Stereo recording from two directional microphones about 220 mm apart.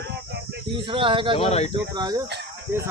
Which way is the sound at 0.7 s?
25° right (ahead or behind).